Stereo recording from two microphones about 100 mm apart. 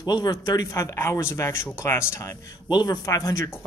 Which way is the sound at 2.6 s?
40° left (ahead or behind).